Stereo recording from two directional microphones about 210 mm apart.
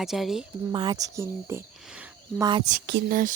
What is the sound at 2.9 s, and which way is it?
Speech, 45° right (ahead or behind).